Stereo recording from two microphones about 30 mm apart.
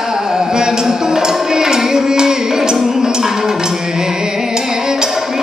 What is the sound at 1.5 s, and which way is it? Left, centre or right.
Music, right.